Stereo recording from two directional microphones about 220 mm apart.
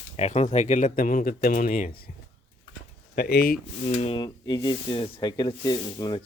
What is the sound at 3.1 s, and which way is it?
Speech, 45° left (ahead or behind).